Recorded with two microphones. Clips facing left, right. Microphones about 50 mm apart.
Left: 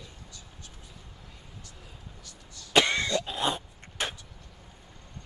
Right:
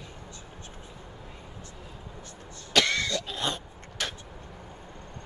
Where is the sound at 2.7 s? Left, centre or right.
Left.